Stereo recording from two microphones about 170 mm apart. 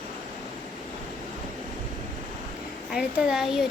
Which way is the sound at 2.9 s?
5° right (ahead or behind).